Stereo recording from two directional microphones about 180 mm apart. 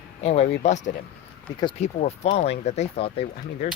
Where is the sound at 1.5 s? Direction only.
25° left (ahead or behind).